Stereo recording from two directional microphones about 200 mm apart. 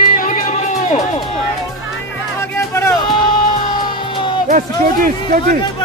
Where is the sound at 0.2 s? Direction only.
40° left (ahead or behind).